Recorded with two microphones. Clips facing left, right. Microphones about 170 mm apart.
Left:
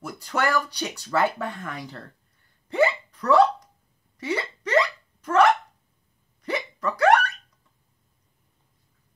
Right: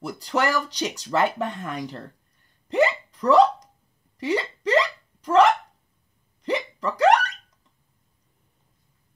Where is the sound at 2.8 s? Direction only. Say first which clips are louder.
Right 1 dB; 20° right (ahead or behind).